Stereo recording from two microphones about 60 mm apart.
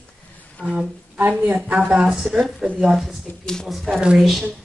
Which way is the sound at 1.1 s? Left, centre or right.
Right.